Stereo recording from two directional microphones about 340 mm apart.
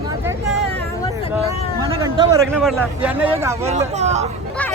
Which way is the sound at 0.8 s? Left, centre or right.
Centre.